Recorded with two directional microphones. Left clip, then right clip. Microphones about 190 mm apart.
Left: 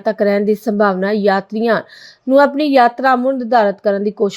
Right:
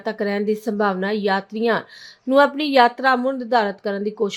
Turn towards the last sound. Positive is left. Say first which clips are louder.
# left 7 dB
turn(degrees=20)  # may be behind; listen again after turning